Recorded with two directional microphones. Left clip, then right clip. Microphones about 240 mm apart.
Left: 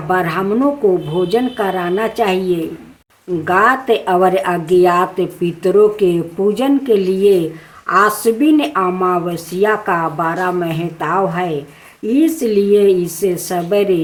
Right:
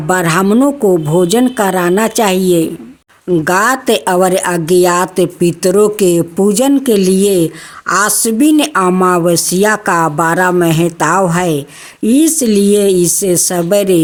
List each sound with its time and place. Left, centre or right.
0.1 s a woman's voice: right